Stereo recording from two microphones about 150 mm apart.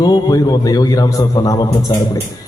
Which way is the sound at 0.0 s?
25° left (ahead or behind).